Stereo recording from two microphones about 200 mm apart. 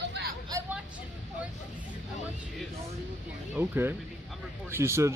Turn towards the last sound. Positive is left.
turn(degrees=-15)  # may be behind; listen again after turning